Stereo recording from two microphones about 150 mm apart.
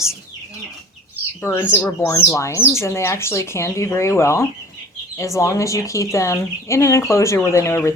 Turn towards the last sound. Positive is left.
turn(degrees=20)  # may be behind; listen again after turning